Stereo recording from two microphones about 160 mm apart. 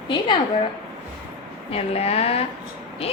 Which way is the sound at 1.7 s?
40° left (ahead or behind).